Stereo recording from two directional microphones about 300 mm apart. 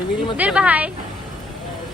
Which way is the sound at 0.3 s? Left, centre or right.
Centre.